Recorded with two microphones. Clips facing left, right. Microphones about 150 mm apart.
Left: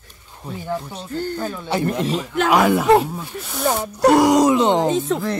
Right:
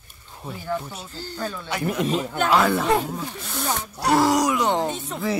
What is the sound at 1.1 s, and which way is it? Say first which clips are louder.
Speech: left 15 dB; 55° left (ahead or behind).